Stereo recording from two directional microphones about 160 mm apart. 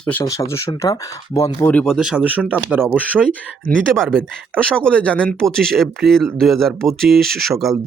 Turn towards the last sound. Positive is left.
turn(degrees=0)  # may be behind; listen again after turning